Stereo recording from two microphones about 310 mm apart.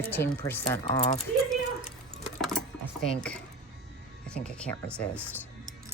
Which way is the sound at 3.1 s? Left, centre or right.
Centre.